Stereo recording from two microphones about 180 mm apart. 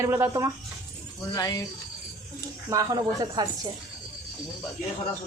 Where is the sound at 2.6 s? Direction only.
20° right (ahead or behind).